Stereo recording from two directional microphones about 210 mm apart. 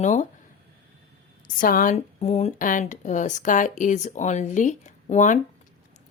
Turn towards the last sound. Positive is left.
turn(degrees=35)  # may be behind; listen again after turning